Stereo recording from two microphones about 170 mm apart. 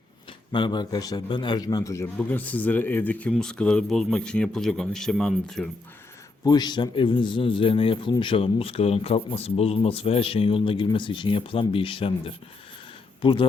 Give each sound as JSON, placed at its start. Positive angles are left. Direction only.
{"t": 0.5, "sound": "a man's voice", "side_deg": 25}
{"t": 6.4, "sound": "speech", "side_deg": 25}